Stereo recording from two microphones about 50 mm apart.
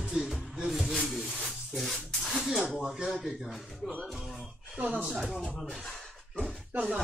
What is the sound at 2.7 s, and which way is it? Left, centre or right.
Speech, centre.